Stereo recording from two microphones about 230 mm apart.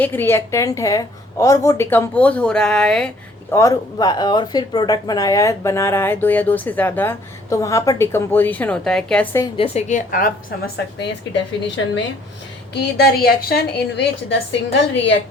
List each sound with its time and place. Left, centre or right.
0.0 s speech: centre
3.5 s speech: centre
9.6 s a woman's voice: left
11.0 s a woman's voice: left